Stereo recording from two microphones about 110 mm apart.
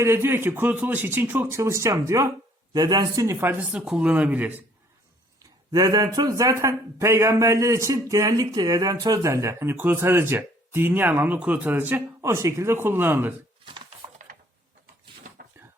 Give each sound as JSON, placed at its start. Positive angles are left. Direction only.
{"t": 0.0, "sound": "speech", "side_deg": -25}
{"t": 3.2, "sound": "speech", "side_deg": -20}
{"t": 3.7, "sound": "speech", "side_deg": -10}
{"t": 5.4, "sound": "speech", "side_deg": -30}